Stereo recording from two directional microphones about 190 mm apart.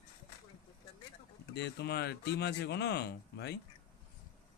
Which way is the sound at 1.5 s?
60° left (ahead or behind).